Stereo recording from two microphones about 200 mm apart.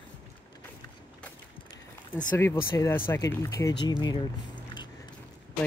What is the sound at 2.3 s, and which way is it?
Speech, 10° left (ahead or behind).